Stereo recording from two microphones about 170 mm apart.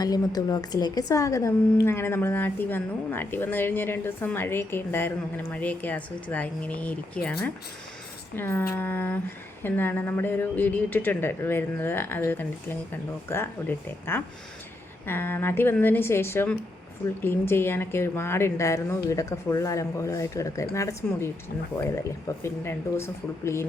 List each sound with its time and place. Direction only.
0.0 s a woman's voice: 20° left (ahead or behind)
22.4 s a woman's voice: 15° left (ahead or behind)